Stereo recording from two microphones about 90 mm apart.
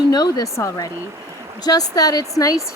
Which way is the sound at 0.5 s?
35° left (ahead or behind).